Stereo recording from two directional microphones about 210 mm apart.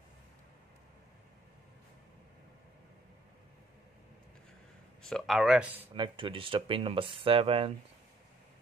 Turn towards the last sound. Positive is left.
turn(degrees=-25)  # may be behind; listen again after turning